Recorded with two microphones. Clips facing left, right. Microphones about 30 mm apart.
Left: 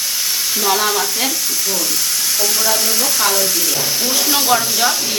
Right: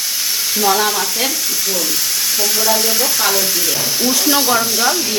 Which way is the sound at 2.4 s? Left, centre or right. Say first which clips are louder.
Right 2 dB; centre.